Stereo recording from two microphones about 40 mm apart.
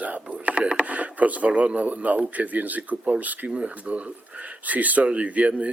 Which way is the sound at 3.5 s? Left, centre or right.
Right.